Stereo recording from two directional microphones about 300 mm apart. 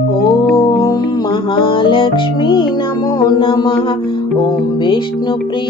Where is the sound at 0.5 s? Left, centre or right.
Centre.